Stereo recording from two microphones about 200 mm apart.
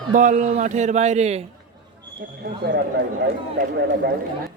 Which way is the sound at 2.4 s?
60° right (ahead or behind).